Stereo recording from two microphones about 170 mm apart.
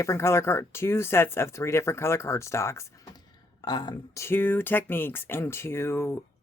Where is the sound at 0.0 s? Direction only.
15° left (ahead or behind).